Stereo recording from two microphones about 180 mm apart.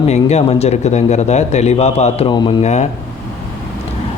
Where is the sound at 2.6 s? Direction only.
40° left (ahead or behind).